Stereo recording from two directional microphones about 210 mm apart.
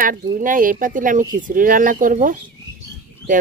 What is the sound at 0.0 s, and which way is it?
Speech, 45° right (ahead or behind).